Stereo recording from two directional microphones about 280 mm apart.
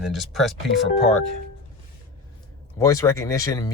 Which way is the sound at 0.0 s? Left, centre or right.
Centre.